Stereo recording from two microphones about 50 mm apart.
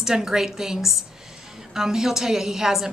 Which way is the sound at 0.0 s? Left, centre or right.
Centre.